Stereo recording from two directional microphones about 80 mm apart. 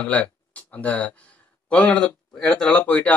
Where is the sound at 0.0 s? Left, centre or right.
Centre.